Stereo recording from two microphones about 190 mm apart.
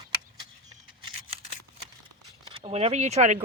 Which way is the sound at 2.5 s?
30° right (ahead or behind).